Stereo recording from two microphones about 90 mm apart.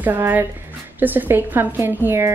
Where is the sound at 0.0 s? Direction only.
20° right (ahead or behind).